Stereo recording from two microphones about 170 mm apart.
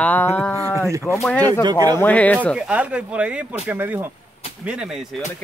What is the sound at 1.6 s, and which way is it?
Speech, 25° right (ahead or behind).